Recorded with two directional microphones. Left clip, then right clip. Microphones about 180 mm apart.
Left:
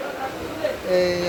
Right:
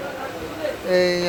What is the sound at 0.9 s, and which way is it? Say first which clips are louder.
Speech: right 2 dB; 55° right (ahead or behind).